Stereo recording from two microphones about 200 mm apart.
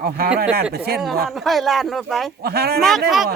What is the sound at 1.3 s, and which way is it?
Speech, centre (ahead or behind).